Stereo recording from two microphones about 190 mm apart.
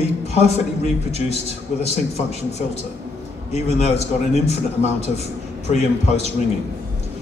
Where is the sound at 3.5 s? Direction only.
35° left (ahead or behind).